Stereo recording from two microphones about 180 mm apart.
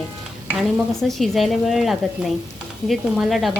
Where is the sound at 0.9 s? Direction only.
Centre (ahead or behind).